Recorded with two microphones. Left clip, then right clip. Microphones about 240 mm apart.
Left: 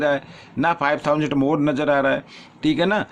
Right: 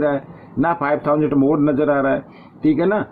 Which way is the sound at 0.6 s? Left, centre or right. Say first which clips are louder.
Right 1 dB; left.